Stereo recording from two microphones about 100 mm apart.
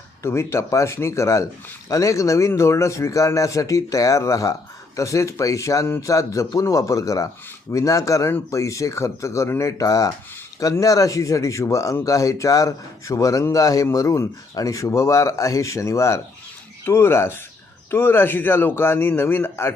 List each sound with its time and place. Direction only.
0.2 s a man's voice: 30° left (ahead or behind)